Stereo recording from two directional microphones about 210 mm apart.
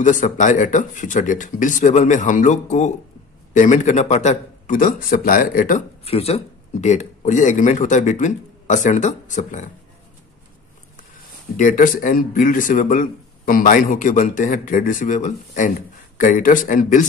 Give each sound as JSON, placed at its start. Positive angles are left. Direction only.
{"t": 0.0, "sound": "a man's voice", "side_deg": 35}
{"t": 11.5, "sound": "a man's voice", "side_deg": 40}